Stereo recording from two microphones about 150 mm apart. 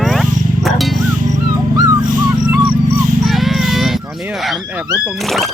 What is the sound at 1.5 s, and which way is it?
Dog, 20° right (ahead or behind).